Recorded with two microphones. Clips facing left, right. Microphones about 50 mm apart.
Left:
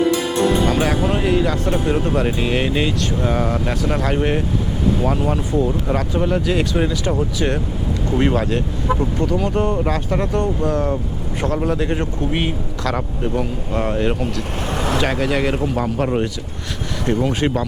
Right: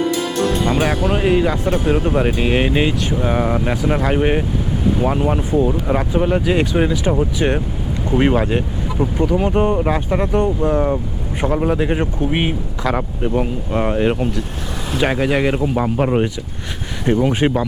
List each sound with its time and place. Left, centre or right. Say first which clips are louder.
0.7 s speech: right 1 dB; centre
14.7 s vehicle: left 7 dB; left
15.0 s speech: right 6 dB; centre